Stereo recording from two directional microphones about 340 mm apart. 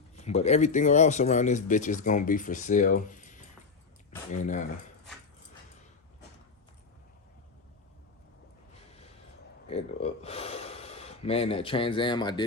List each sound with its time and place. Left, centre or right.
0.2 s speech: centre
9.6 s speech: centre